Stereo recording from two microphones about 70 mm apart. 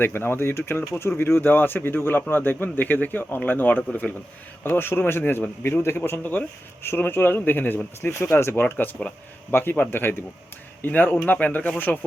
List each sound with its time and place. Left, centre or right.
0.0 s speech: left